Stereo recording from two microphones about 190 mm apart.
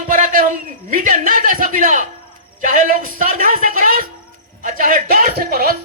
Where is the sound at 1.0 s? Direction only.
45° right (ahead or behind).